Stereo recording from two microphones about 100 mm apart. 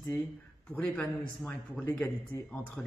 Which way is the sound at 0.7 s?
20° left (ahead or behind).